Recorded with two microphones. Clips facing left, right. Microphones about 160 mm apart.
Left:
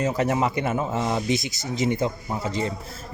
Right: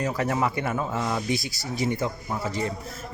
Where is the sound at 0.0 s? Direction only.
20° left (ahead or behind).